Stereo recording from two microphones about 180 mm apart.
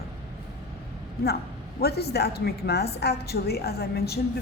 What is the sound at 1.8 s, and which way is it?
Speech, 60° left (ahead or behind).